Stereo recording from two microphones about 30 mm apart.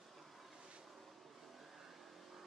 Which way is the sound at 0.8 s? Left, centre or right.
Centre.